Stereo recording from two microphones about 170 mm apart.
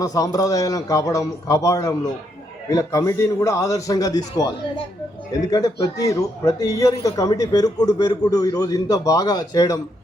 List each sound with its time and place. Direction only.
0.0 s speech: 20° left (ahead or behind)